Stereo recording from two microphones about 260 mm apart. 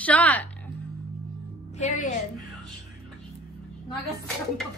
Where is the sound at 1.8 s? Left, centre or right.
Left.